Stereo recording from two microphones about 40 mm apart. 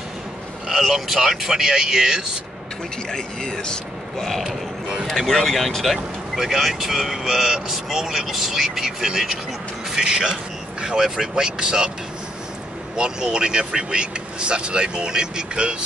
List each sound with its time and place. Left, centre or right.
0.7 s speech: centre
3.1 s speech: centre
4.2 s speech: centre
5.9 s speech: centre
12.9 s speech: right